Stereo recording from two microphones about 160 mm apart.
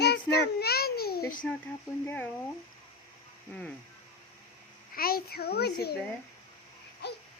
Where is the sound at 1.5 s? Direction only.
10° left (ahead or behind).